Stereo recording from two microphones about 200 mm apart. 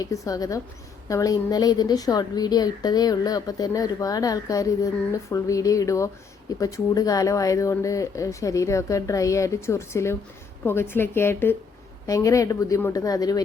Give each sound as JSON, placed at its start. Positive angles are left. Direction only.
{"t": 0.0, "sound": "a woman's voice", "side_deg": 15}